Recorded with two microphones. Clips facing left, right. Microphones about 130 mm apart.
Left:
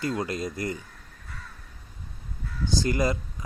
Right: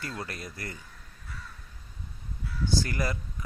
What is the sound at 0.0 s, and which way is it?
Speech, 20° left (ahead or behind).